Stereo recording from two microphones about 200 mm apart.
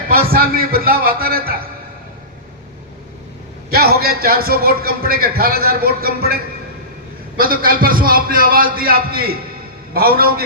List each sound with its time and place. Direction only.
0.1 s a man's voice: 50° right (ahead or behind)
3.7 s a man's voice: 50° right (ahead or behind)